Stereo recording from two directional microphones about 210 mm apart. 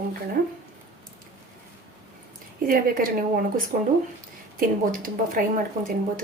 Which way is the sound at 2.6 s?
40° right (ahead or behind).